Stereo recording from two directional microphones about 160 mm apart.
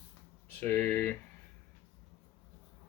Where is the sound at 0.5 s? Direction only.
10° left (ahead or behind).